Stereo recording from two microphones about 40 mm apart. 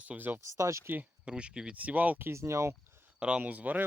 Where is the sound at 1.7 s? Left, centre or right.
Right.